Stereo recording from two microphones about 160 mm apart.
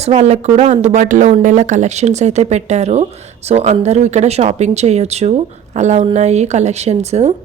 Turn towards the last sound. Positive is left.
turn(degrees=-45)  # may be behind; listen again after turning